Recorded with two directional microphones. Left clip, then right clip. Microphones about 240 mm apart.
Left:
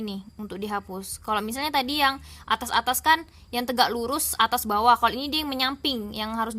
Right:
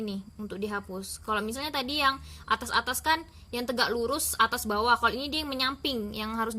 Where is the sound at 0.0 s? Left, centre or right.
Left.